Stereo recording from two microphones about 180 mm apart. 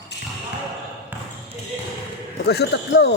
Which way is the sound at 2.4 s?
65° left (ahead or behind).